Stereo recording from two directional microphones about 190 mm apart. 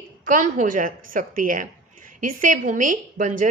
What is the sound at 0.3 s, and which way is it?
A woman's voice, 45° right (ahead or behind).